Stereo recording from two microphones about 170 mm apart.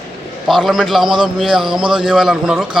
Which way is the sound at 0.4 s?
Centre (ahead or behind).